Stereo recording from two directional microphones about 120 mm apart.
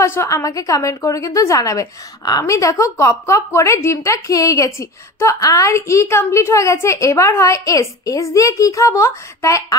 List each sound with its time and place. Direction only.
0.0 s a woman's voice: 25° left (ahead or behind)